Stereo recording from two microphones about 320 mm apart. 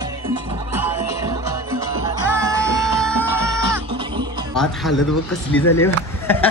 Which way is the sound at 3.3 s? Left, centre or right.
Centre.